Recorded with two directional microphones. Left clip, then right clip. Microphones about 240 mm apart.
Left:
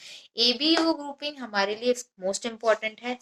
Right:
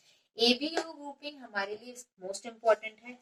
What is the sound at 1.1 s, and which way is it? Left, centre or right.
Speech, left.